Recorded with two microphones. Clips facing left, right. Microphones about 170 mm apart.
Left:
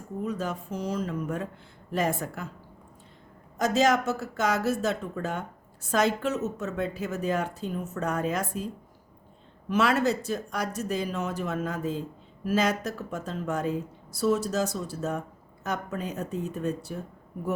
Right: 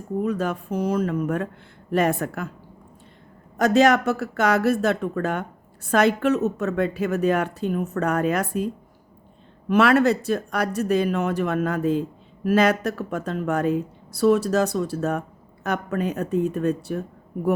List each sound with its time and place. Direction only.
0.2 s speech: 60° right (ahead or behind)
3.6 s speech: 65° right (ahead or behind)